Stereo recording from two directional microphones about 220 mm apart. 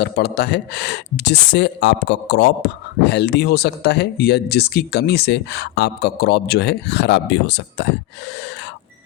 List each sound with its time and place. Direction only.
0.0 s speech: 50° left (ahead or behind)